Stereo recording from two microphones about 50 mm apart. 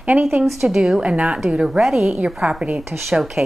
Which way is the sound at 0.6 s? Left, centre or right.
Centre.